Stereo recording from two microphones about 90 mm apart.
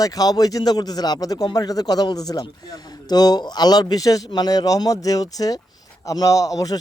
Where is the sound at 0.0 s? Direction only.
45° left (ahead or behind).